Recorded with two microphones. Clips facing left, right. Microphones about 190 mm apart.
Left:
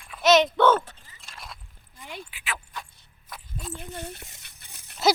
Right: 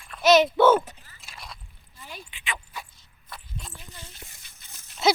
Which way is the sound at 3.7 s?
60° left (ahead or behind).